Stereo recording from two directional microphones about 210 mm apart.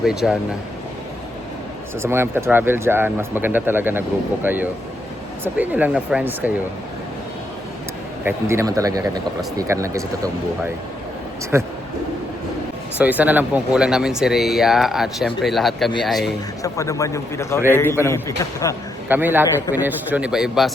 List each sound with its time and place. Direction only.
0.0 s speech: centre (ahead or behind)
2.0 s speech: 10° right (ahead or behind)
8.2 s speech: 10° right (ahead or behind)
11.5 s speech: 10° right (ahead or behind)
13.0 s speech: 5° right (ahead or behind)
16.6 s a man's voice: 15° left (ahead or behind)
19.0 s a man's voice: 10° right (ahead or behind)